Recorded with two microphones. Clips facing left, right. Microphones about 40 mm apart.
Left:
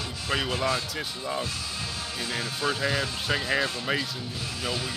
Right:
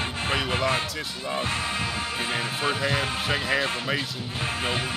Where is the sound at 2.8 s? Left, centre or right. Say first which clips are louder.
Right 2 dB; right.